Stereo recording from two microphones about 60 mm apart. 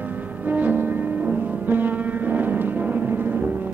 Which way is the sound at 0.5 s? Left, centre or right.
Right.